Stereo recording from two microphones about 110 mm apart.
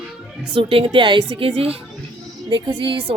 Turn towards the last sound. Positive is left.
turn(degrees=-55)  # may be behind; listen again after turning